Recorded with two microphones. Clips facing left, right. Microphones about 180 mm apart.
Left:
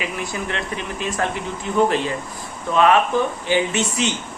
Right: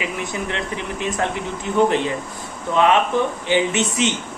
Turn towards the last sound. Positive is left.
turn(degrees=-20)  # may be behind; listen again after turning